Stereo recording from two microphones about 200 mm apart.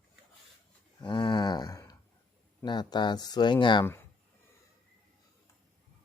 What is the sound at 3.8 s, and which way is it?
Speech, 10° left (ahead or behind).